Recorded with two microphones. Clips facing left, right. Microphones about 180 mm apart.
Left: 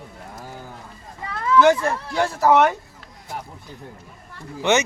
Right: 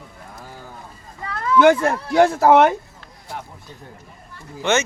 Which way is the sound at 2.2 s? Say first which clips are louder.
Right 4 dB; 55° right (ahead or behind).